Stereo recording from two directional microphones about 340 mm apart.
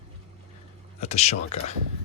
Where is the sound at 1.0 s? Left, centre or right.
Centre.